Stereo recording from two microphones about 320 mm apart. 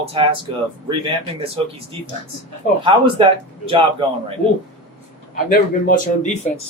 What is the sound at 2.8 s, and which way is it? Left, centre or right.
Speech, centre.